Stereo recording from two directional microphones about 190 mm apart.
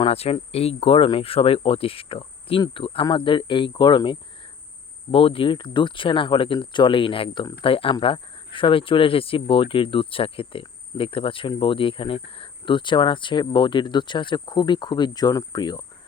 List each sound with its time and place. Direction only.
0.0 s speech: 30° left (ahead or behind)